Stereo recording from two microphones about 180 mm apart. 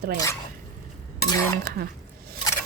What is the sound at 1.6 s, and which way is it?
Stir, 55° right (ahead or behind).